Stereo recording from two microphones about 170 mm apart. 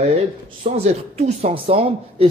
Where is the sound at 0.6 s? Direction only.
40° right (ahead or behind).